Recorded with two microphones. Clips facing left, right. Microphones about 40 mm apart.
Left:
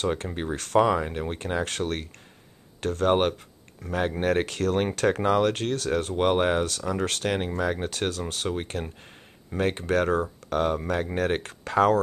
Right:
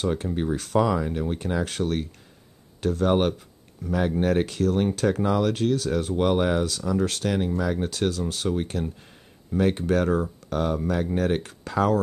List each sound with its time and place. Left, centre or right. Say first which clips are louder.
0.3 s speech: right 4 dB; left
0.7 s speech: left 2 dB; left
1.6 s speech: right 2 dB; left
4.5 s speech: right 2 dB; left